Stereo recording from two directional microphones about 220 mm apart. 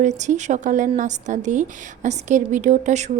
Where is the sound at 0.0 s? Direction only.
35° right (ahead or behind).